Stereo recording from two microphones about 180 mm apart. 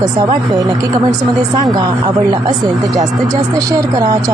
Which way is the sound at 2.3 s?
25° right (ahead or behind).